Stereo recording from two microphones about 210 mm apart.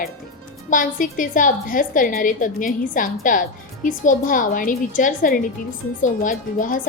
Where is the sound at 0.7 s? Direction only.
40° left (ahead or behind).